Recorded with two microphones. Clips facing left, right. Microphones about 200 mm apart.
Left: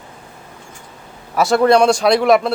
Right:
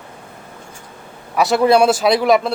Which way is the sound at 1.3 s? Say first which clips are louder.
Left 1 dB; centre (ahead or behind).